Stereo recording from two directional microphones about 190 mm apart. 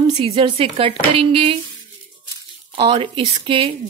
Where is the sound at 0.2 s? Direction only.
30° right (ahead or behind).